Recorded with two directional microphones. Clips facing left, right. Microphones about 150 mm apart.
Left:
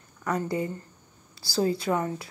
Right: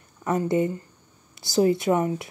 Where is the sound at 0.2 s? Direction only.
20° right (ahead or behind).